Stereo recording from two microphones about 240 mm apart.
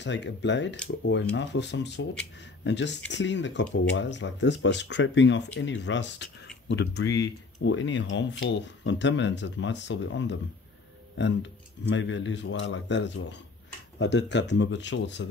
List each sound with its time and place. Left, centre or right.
0.0 s speech: left
11.9 s speech: left